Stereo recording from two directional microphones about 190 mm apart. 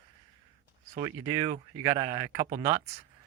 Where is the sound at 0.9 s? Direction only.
20° right (ahead or behind).